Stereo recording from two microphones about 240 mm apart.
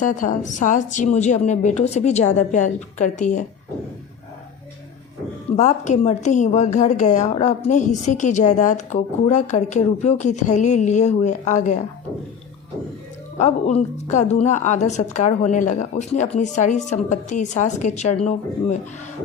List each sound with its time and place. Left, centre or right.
0.0 s a woman's voice: left
5.5 s a woman's voice: left
13.4 s a woman's voice: left